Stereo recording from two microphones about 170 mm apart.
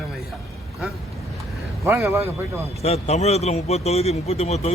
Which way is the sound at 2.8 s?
40° left (ahead or behind).